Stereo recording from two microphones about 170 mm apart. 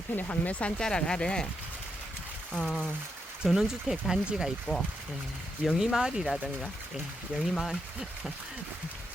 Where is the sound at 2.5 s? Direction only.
5° left (ahead or behind).